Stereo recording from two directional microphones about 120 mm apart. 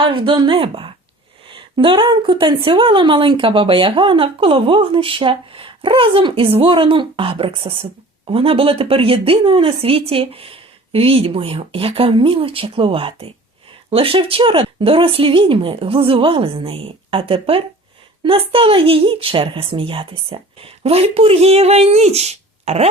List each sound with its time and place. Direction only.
0.0 s a woman's voice: 45° right (ahead or behind); by 22.9 s 60° right (ahead or behind)